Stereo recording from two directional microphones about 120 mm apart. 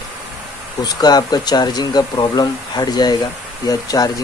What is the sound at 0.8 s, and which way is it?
Speech, 35° left (ahead or behind).